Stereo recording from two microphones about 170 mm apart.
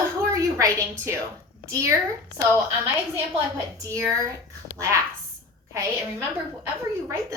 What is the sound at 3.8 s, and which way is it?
A woman's voice, 20° right (ahead or behind).